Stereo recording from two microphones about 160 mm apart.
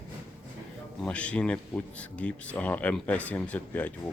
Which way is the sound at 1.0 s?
10° left (ahead or behind).